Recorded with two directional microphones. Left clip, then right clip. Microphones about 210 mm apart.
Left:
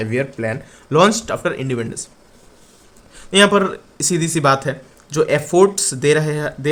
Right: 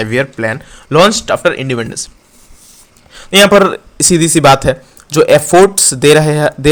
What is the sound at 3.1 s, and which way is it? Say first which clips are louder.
Speech: right 7 dB; 25° right (ahead or behind).